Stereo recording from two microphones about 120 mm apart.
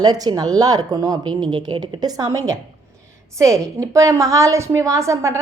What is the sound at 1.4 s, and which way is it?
A woman's voice, 45° right (ahead or behind).